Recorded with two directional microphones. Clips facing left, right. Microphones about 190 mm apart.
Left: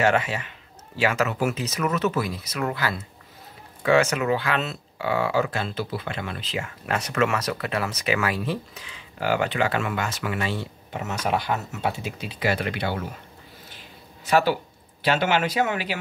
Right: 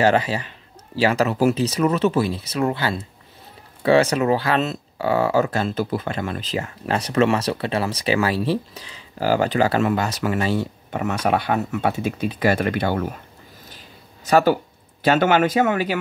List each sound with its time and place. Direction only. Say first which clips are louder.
0.0 s speech: right 4 dB; 35° right (ahead or behind)
11.0 s speech: right 5 dB; 60° right (ahead or behind)
13.7 s a sound: right 1 dB; 40° right (ahead or behind)